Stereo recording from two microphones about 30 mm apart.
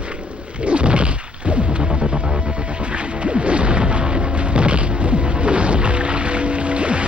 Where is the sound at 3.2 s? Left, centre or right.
Right.